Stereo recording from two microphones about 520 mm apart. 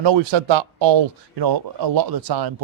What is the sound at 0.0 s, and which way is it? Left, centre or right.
Speech, right.